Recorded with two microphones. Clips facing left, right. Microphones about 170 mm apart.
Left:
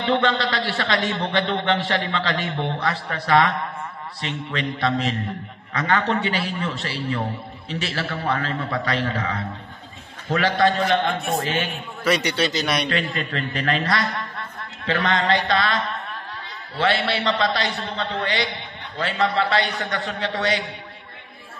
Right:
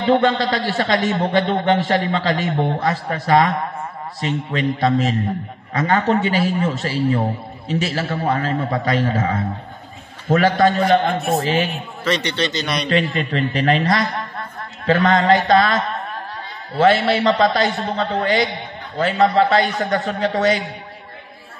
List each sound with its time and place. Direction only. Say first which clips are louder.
0.0 s a man's voice: right 5 dB; 45° right (ahead or behind)
10.3 s a man's voice: right 4 dB; 45° right (ahead or behind)
12.0 s a man's voice: even; 10° left (ahead or behind)
12.9 s a man's voice: right 6 dB; 45° left (ahead or behind)
13.3 s a man's voice: right 8 dB; 40° right (ahead or behind)
14.9 s a man's voice: right 7 dB; 40° right (ahead or behind)